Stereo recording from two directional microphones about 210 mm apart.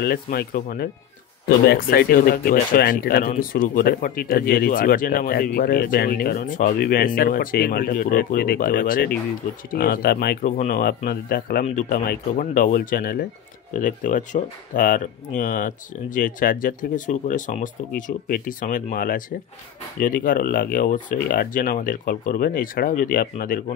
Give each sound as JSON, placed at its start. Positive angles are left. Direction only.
{"t": 0.0, "sound": "speech", "side_deg": 45}